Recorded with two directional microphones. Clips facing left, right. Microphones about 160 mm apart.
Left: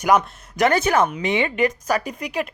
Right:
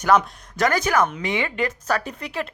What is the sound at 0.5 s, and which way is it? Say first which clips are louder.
Speech: left 2 dB; 25° left (ahead or behind).